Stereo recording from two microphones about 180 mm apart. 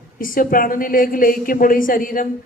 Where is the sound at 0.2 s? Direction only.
50° left (ahead or behind).